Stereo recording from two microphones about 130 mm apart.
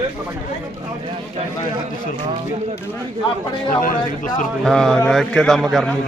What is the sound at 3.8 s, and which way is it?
Speech, 90° left.